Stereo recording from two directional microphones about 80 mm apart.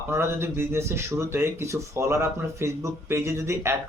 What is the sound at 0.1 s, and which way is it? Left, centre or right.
Speech, right.